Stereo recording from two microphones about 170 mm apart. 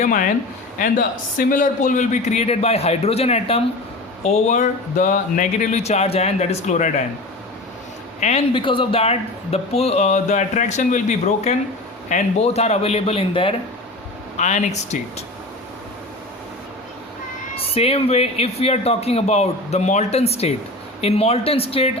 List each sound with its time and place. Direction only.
0.0 s speech: 50° left (ahead or behind)
8.2 s speech: 40° left (ahead or behind)
14.3 s speech: 45° left (ahead or behind)
17.6 s speech: 35° left (ahead or behind)